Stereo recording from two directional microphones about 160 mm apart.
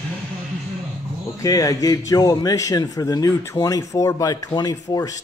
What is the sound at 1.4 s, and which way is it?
Speech, 20° left (ahead or behind).